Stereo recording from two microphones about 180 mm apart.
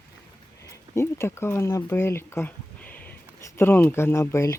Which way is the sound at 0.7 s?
15° left (ahead or behind).